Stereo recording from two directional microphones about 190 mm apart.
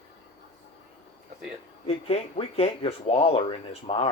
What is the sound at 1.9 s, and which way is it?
Speech, 30° left (ahead or behind).